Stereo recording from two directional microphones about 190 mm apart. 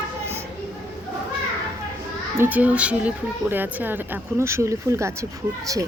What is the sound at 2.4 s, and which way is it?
A woman's voice, 10° right (ahead or behind).